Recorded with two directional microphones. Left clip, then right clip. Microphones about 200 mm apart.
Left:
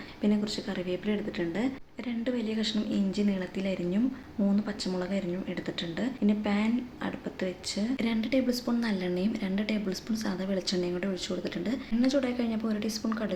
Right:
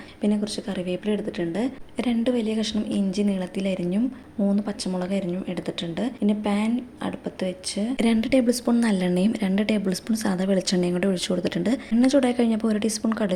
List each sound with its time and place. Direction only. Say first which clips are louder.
0.2 s a woman's voice: right 4 dB; 20° right (ahead or behind)
6.0 s a woman's voice: right 4 dB; 25° right (ahead or behind)
7.9 s a woman's voice: right 9 dB; 35° right (ahead or behind)